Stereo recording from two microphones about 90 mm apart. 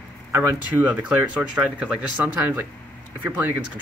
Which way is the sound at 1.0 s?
15° right (ahead or behind).